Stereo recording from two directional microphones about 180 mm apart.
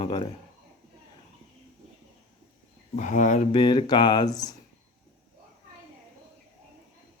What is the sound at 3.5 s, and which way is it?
A man's voice, 25° left (ahead or behind).